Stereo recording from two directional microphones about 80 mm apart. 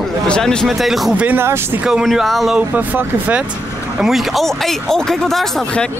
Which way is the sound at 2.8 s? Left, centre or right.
Right.